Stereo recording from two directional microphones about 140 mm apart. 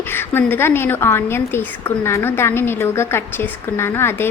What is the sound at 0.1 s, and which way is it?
A woman's voice, 15° left (ahead or behind).